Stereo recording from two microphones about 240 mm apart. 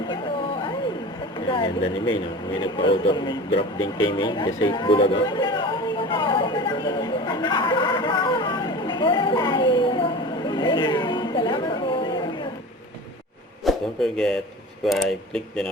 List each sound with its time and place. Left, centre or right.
1.5 s speech: left
2.8 s a sound: centre
13.7 s speech: centre